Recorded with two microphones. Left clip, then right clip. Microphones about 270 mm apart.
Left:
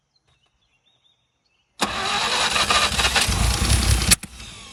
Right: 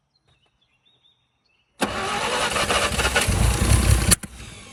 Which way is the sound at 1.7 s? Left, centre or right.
Centre.